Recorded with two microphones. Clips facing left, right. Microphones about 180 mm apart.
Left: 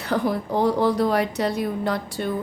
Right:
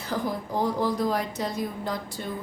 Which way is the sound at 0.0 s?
70° left (ahead or behind).